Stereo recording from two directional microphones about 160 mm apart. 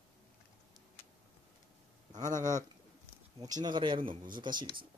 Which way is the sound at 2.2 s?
50° right (ahead or behind).